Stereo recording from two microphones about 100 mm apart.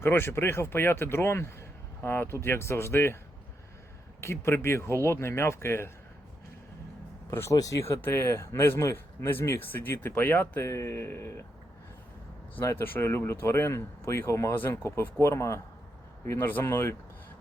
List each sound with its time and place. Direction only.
0.0 s speech: 25° left (ahead or behind)
4.2 s speech: 25° left (ahead or behind)
7.3 s speech: 25° left (ahead or behind)
12.5 s speech: 20° left (ahead or behind)